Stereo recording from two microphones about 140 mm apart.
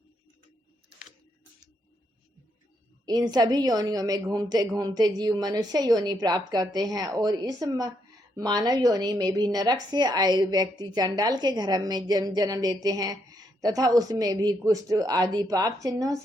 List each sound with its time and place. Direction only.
3.1 s speech: 30° right (ahead or behind)